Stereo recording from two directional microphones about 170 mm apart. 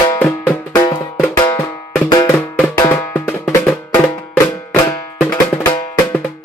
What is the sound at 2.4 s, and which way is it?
Music, 5° left (ahead or behind).